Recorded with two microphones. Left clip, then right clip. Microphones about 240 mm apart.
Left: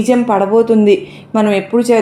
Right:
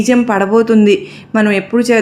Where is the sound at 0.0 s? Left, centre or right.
Right.